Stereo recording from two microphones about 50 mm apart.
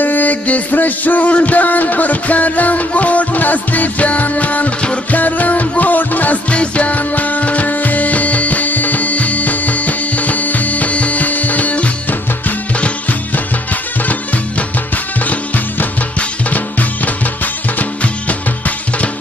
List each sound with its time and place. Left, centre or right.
0.0 s music: left
16.2 s music: left